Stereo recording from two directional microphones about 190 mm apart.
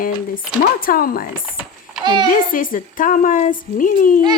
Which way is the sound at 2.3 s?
45° left (ahead or behind).